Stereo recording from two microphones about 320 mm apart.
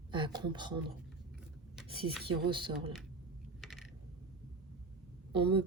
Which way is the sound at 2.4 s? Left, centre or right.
Centre.